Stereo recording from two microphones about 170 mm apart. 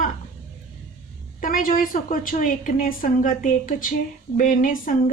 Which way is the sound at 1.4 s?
55° left (ahead or behind).